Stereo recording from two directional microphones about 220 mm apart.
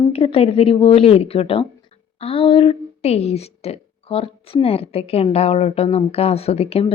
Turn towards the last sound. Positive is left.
turn(degrees=30)  # may be behind; listen again after turning